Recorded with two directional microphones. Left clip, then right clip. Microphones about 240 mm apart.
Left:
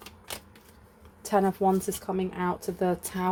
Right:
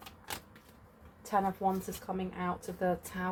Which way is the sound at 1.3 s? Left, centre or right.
Left.